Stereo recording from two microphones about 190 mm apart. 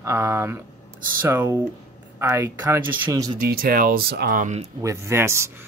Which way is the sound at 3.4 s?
50° right (ahead or behind).